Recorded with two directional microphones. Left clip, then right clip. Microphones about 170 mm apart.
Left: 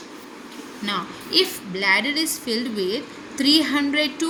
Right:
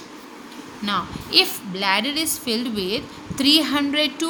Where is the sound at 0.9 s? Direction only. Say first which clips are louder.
Right 2 dB; 50° right (ahead or behind).